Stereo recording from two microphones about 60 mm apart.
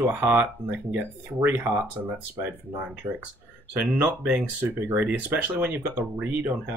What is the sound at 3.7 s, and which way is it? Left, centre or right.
Speech, right.